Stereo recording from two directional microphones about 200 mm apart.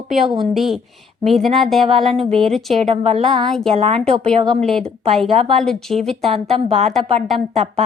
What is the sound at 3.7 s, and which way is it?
Speech, 30° right (ahead or behind).